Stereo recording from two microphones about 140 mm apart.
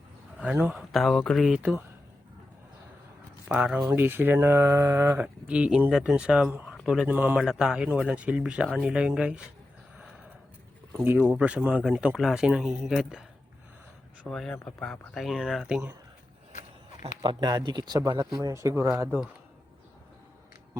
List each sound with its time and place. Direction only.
0.3 s a man's voice: 10° right (ahead or behind)
0.8 s speech: centre (ahead or behind)
3.5 s speech: 5° right (ahead or behind)
10.9 s speech: 15° right (ahead or behind)
14.3 s speech: 5° left (ahead or behind)
17.2 s speech: 30° right (ahead or behind); by 19.3 s 15° right (ahead or behind)